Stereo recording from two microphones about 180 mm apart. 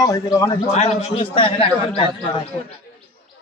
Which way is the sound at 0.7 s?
35° left (ahead or behind).